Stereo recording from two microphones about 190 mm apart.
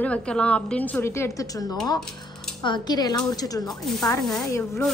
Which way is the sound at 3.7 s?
Centre (ahead or behind).